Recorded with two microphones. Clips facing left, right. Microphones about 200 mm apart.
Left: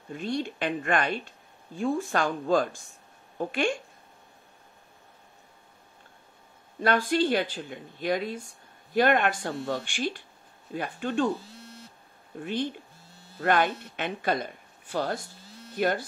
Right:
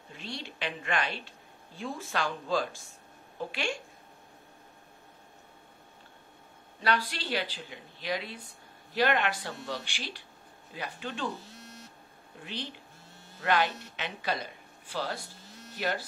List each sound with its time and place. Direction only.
0.1 s speech: 50° left (ahead or behind)
6.8 s speech: 50° left (ahead or behind)
12.4 s speech: 50° left (ahead or behind)